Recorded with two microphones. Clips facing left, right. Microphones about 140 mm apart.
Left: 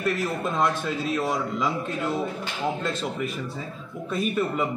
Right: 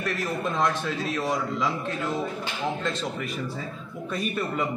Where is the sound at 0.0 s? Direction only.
5° left (ahead or behind).